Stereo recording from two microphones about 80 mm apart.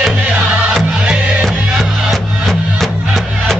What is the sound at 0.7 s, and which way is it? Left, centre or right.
Music, centre.